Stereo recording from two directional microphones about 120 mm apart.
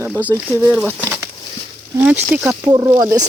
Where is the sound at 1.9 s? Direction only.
15° right (ahead or behind).